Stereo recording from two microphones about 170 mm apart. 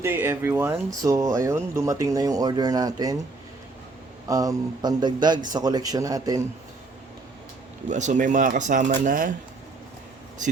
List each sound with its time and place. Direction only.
0.0 s speech: 15° right (ahead or behind)
4.3 s speech: 20° right (ahead or behind)
7.9 s speech: 45° right (ahead or behind)